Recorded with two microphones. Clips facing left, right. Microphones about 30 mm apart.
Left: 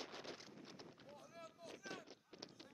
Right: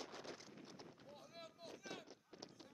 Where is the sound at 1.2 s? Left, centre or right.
Right.